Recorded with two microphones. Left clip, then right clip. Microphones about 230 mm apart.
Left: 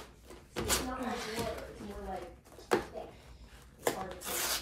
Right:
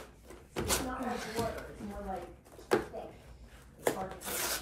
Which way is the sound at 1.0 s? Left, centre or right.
Centre.